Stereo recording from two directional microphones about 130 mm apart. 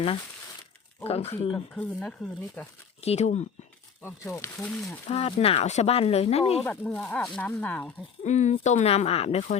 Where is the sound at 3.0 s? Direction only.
55° left (ahead or behind).